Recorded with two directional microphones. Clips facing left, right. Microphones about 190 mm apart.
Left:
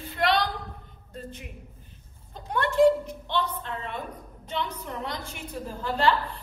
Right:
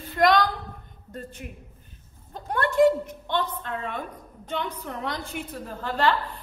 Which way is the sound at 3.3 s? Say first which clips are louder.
Right 2 dB; 50° right (ahead or behind).